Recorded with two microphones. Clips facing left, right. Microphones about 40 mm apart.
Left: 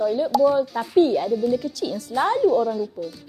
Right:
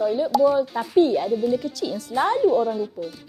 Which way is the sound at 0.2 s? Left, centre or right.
Centre.